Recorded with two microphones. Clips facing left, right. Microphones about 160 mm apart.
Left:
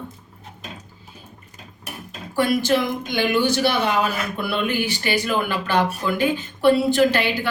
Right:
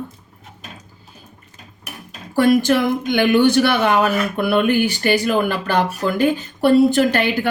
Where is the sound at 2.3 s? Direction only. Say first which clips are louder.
Right 5 dB; 50° right (ahead or behind).